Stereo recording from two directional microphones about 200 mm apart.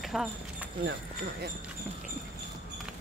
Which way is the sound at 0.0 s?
Centre (ahead or behind).